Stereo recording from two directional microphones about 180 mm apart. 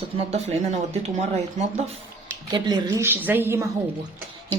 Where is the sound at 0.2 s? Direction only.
35° right (ahead or behind).